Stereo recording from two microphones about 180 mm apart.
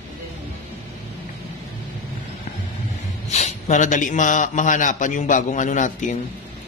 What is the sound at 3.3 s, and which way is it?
A man's voice, 40° left (ahead or behind).